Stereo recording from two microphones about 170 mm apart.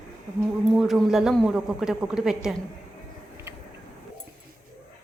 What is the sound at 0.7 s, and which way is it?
A man's voice, centre (ahead or behind).